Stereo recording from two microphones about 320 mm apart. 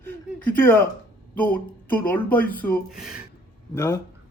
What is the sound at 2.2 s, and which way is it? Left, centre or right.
A man's voice, centre.